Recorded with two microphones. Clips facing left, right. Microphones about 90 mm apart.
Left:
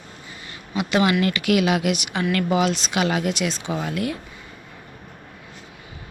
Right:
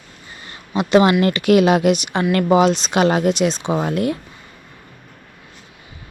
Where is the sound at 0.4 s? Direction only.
35° right (ahead or behind).